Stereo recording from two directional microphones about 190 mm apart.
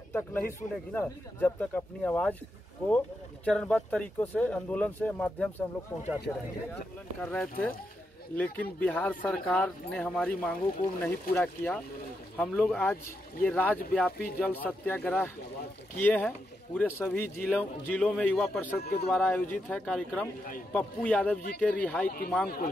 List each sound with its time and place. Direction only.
0.1 s speech: 10° left (ahead or behind)
3.4 s speech: 5° left (ahead or behind)
7.2 s speech: 10° left (ahead or behind)
18.8 s speech: 55° left (ahead or behind)
19.0 s speech: 5° left (ahead or behind)
22.0 s speech: 50° left (ahead or behind)